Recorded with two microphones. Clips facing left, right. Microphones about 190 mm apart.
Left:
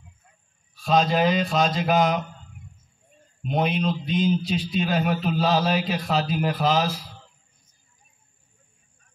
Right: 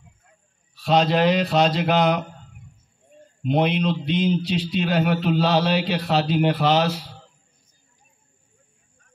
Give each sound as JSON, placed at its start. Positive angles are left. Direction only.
{"t": 0.8, "sound": "a man's voice", "side_deg": -70}
{"t": 3.4, "sound": "a man's voice", "side_deg": -70}